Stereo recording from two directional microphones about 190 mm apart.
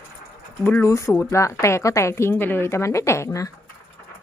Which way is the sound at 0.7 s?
15° left (ahead or behind).